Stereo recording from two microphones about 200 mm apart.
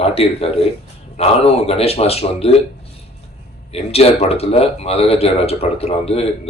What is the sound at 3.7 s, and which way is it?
Speech, 30° left (ahead or behind).